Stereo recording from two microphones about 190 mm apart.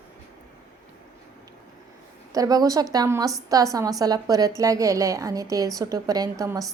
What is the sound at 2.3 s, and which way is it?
A woman's voice, 20° right (ahead or behind).